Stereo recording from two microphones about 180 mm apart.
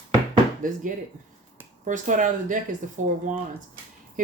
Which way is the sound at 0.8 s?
45° right (ahead or behind).